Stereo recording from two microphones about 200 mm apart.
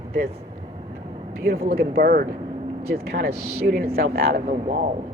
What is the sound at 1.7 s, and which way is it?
Speech, 50° right (ahead or behind).